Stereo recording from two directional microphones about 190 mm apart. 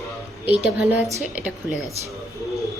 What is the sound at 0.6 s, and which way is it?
A woman's voice, 5° right (ahead or behind).